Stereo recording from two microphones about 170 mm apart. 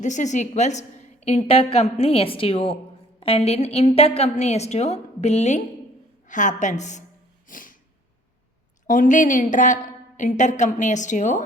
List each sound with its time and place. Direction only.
0.0 s a woman's voice: 45° left (ahead or behind)
7.4 s snort: 55° left (ahead or behind)
8.9 s a woman's voice: 50° left (ahead or behind)